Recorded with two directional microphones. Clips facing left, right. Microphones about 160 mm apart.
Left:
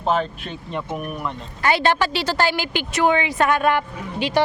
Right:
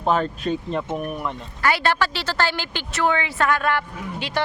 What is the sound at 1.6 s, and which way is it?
Speech, 20° left (ahead or behind).